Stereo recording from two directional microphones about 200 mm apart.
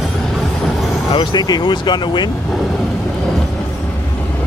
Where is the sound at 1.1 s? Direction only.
25° left (ahead or behind).